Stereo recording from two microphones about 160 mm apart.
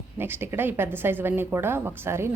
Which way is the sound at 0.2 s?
15° right (ahead or behind).